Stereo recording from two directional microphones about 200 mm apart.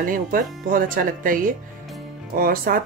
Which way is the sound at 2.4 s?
45° right (ahead or behind).